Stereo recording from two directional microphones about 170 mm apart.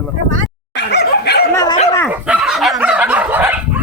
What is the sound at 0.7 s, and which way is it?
Dog, 80° left.